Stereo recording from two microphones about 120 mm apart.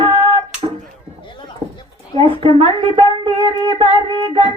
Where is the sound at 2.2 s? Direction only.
50° right (ahead or behind).